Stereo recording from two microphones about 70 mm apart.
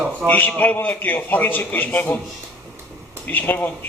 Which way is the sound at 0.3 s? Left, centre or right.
Left.